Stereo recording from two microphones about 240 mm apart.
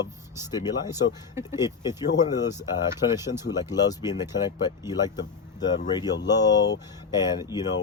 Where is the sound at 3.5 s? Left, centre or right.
Centre.